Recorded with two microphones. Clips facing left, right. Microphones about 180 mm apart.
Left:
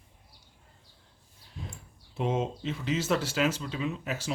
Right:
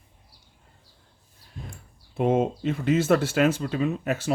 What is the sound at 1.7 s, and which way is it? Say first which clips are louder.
Speech: right 2 dB; 55° right (ahead or behind).